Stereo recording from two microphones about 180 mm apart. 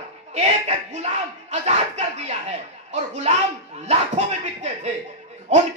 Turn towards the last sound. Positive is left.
turn(degrees=-40)  # may be behind; listen again after turning